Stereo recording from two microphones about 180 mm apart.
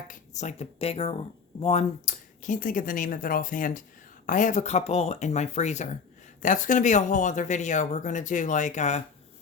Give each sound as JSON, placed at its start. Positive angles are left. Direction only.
{"t": 0.1, "sound": "speech", "side_deg": 40}